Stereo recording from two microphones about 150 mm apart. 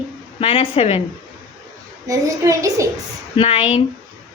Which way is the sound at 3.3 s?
40° left (ahead or behind).